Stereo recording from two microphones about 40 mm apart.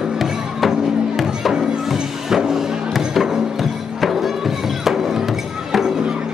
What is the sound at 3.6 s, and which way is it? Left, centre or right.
Music, centre.